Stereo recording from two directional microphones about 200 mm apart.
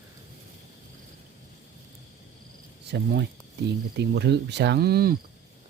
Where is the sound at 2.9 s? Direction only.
60° right (ahead or behind).